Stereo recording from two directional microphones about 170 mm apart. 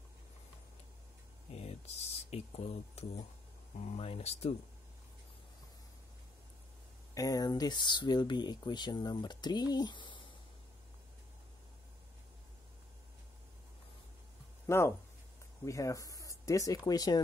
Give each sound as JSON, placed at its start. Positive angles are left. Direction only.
{"t": 1.5, "sound": "a sound", "side_deg": 40}
{"t": 2.3, "sound": "speech", "side_deg": 40}
{"t": 7.2, "sound": "speech", "side_deg": 20}
{"t": 14.7, "sound": "speech", "side_deg": 15}